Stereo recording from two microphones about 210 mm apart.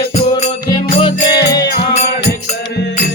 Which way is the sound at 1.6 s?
50° left (ahead or behind).